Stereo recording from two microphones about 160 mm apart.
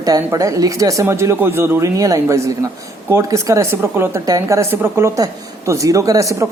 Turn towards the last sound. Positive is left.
turn(degrees=-20)  # may be behind; listen again after turning